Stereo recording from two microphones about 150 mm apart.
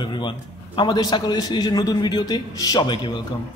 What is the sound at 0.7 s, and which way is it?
Speech, 30° left (ahead or behind).